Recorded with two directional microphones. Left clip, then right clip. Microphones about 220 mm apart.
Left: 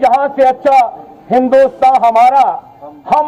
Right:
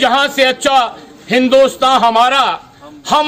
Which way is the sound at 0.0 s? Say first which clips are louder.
Left 2 dB; 25° right (ahead or behind).